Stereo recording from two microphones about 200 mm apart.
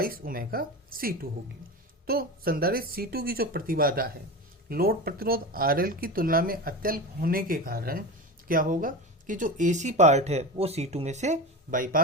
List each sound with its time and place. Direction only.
0.0 s speech: 45° right (ahead or behind)